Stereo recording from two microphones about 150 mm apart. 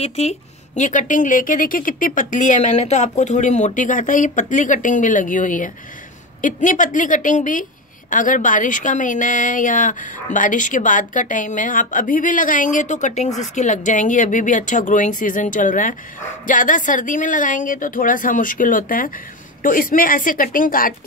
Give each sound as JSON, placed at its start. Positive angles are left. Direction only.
{"t": 0.0, "sound": "a woman's voice", "side_deg": 45}